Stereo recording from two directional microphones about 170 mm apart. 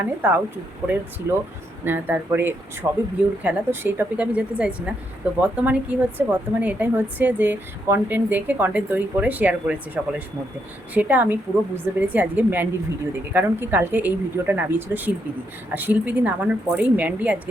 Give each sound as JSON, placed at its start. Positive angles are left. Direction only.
{"t": 0.0, "sound": "speech", "side_deg": -10}
{"t": 1.8, "sound": "speech", "side_deg": -10}